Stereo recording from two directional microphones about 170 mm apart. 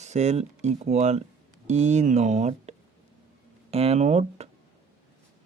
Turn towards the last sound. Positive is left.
turn(degrees=-40)  # may be behind; listen again after turning